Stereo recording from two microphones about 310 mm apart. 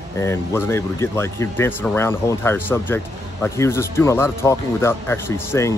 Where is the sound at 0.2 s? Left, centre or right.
Centre.